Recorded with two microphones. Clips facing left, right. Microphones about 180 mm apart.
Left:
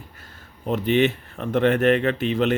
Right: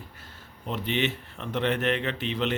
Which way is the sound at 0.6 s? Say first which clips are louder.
Left 9 dB; 45° left (ahead or behind).